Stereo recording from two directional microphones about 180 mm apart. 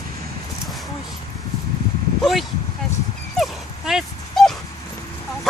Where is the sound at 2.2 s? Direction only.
Centre (ahead or behind).